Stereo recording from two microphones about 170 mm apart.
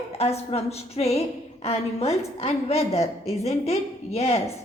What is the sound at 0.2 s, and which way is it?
A woman's voice, 35° left (ahead or behind).